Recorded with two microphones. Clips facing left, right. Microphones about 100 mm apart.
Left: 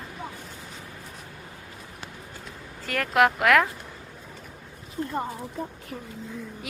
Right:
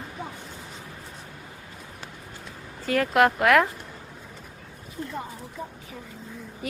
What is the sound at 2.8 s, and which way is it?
Speech, centre (ahead or behind).